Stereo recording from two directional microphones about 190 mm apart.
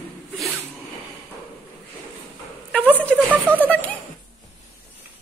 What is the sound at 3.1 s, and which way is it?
Speech, 5° left (ahead or behind).